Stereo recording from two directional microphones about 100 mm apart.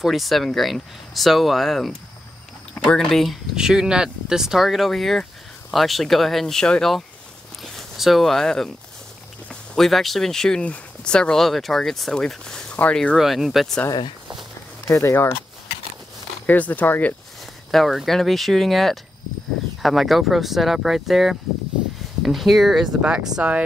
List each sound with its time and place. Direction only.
0.0 s speech: centre (ahead or behind)
13.2 s speech: 5° right (ahead or behind)
14.9 s speech: 30° left (ahead or behind)
16.4 s speech: 15° left (ahead or behind)
17.6 s speech: centre (ahead or behind)